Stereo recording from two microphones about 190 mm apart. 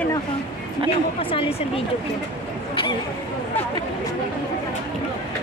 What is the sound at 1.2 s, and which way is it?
Speech, 30° left (ahead or behind).